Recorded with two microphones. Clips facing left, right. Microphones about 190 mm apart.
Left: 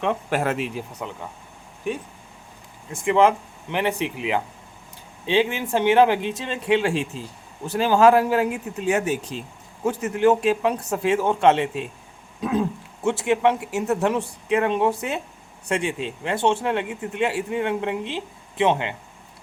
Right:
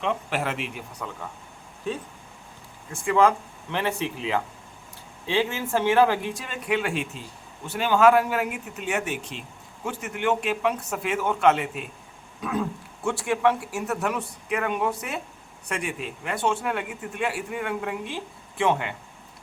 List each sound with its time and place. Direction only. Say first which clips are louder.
0.0 s speech: left 4 dB; 50° left (ahead or behind); by 1.0 s 35° left (ahead or behind)
2.9 s a man's voice: left 3 dB; 20° left (ahead or behind)